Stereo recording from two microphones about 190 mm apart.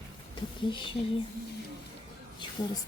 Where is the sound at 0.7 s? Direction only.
25° left (ahead or behind).